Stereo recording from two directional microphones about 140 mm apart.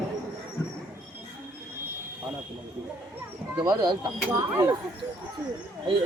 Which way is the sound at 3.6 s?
30° right (ahead or behind).